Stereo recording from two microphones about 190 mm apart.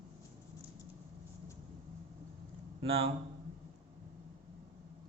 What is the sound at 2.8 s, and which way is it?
Speech, 30° right (ahead or behind).